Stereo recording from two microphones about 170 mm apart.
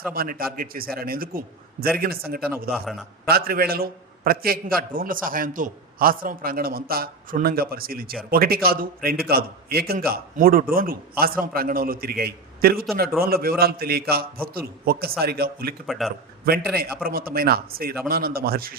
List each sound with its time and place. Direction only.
0.1 s a man's voice: 60° right (ahead or behind)
2.7 s a man's voice: centre (ahead or behind)
3.2 s a man's voice: 65° right (ahead or behind)
15.9 s a man's voice: centre (ahead or behind)
16.7 s a man's voice: 65° right (ahead or behind)